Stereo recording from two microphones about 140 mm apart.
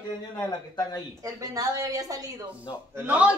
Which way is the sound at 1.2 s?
25° right (ahead or behind).